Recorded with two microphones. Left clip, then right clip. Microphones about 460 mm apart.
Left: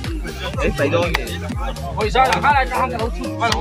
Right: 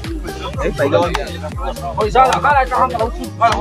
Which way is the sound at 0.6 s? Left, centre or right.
Left.